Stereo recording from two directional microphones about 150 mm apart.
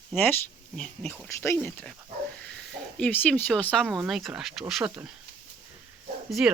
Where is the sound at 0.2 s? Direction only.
10° left (ahead or behind).